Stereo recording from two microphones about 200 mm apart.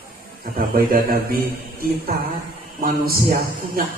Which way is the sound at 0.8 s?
50° right (ahead or behind).